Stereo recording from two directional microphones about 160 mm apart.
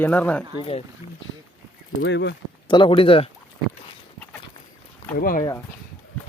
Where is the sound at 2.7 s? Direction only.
30° left (ahead or behind).